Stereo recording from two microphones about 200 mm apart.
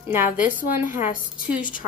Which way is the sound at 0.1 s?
10° right (ahead or behind).